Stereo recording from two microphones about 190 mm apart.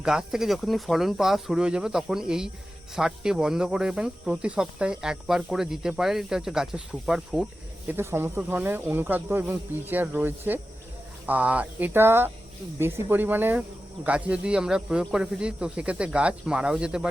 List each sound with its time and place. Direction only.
0.0 s speech: 5° right (ahead or behind)